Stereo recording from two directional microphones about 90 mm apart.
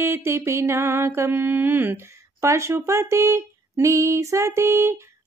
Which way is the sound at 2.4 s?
35° right (ahead or behind).